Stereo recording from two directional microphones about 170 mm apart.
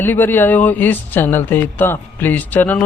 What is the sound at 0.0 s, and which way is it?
Speech, 10° left (ahead or behind).